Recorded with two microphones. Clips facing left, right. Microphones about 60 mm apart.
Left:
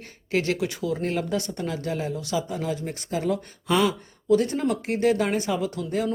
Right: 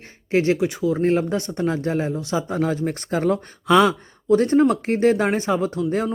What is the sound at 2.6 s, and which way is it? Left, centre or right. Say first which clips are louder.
Speech: right 7 dB; right.